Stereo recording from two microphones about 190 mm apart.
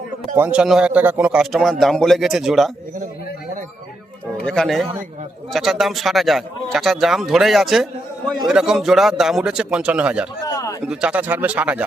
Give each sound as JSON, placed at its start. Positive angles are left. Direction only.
{"t": 0.3, "sound": "speech", "side_deg": -10}
{"t": 4.4, "sound": "speech", "side_deg": 5}
{"t": 10.4, "sound": "a sound", "side_deg": 20}
{"t": 10.8, "sound": "speech", "side_deg": -5}